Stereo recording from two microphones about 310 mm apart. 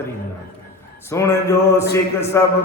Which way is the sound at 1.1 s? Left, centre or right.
Centre.